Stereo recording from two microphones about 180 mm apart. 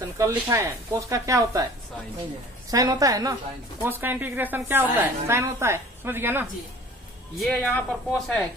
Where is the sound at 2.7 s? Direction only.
20° right (ahead or behind).